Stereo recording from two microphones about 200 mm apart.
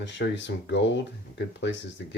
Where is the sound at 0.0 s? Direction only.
60° left (ahead or behind).